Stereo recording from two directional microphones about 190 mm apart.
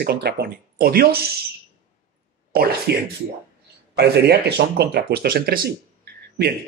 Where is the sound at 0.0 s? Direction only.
55° right (ahead or behind).